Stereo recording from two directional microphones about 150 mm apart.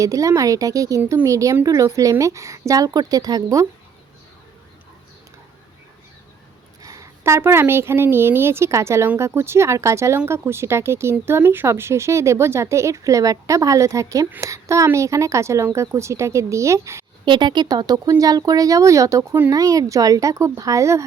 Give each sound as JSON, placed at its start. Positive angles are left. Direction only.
{"t": 0.0, "sound": "a woman's voice", "side_deg": -20}
{"t": 6.8, "sound": "a woman's voice", "side_deg": -20}
{"t": 17.2, "sound": "a woman's voice", "side_deg": -30}